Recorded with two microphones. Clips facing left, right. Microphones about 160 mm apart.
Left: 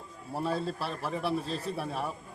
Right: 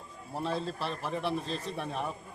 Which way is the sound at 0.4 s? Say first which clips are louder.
Left 1 dB; 10° left (ahead or behind).